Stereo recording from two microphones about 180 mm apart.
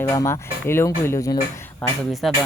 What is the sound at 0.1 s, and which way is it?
Speech, 15° left (ahead or behind).